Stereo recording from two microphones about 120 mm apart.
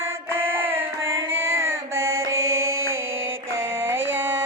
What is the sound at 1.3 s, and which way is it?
Mantra, 20° right (ahead or behind).